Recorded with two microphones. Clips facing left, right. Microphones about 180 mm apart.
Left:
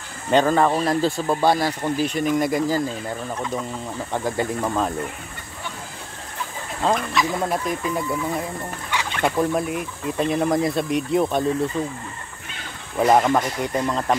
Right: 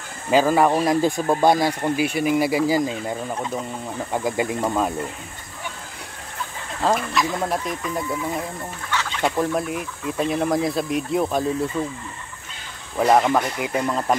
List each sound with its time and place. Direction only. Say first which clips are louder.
0.3 s speech: right 1 dB; 5° right (ahead or behind)
6.8 s speech: even; 5° right (ahead or behind)
12.9 s speech: even; centre (ahead or behind)